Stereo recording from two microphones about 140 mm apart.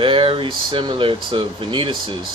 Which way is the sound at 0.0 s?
40° right (ahead or behind).